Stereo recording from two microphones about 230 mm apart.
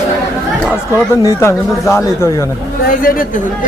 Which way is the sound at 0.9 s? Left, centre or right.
Centre.